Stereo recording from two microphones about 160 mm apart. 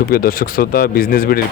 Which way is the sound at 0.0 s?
65° left (ahead or behind).